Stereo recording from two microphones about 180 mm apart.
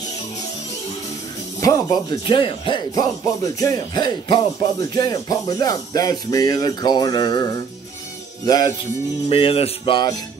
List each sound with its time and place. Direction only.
1.6 s music: 20° left (ahead or behind)
9.3 s music: 30° left (ahead or behind)